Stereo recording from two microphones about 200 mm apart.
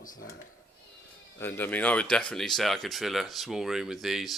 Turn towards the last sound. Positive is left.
turn(degrees=0)  # may be behind; listen again after turning